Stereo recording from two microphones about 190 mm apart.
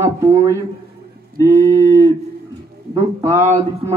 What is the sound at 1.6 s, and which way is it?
A man's voice, 15° right (ahead or behind).